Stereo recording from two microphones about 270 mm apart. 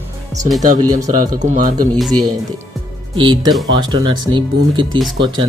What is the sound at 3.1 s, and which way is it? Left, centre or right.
Speech, centre.